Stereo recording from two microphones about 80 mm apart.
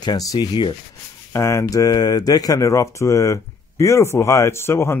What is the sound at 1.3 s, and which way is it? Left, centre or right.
Speech, left.